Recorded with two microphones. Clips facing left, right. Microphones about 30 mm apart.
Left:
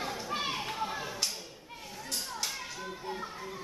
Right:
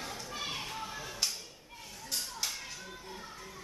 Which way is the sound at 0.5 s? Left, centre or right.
Centre.